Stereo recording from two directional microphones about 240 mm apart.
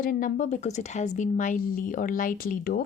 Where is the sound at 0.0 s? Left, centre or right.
Left.